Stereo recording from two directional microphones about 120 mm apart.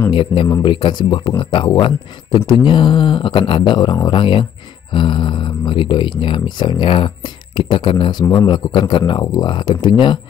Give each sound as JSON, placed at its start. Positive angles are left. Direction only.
{"t": 0.1, "sound": "a man's voice", "side_deg": 45}